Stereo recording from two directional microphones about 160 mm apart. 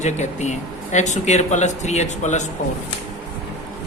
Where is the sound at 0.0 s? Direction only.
45° left (ahead or behind).